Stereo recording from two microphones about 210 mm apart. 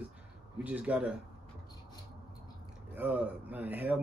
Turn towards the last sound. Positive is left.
turn(degrees=-10)  # may be behind; listen again after turning